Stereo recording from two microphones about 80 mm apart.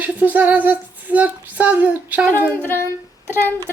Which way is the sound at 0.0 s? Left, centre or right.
Centre.